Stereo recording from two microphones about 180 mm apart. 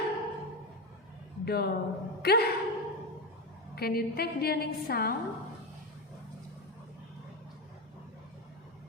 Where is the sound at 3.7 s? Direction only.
60° left (ahead or behind).